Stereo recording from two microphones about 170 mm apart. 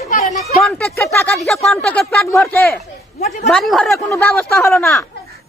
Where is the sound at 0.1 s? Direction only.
45° left (ahead or behind).